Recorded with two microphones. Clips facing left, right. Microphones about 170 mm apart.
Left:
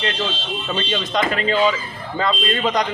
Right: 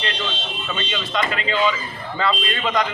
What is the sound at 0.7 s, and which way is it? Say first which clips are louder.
A man's voice: left 4 dB; 35° left (ahead or behind).